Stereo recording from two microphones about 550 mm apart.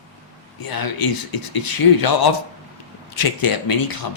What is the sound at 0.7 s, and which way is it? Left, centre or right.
Speech, left.